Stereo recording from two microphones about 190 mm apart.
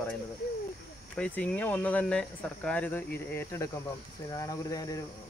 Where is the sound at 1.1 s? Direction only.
5° left (ahead or behind).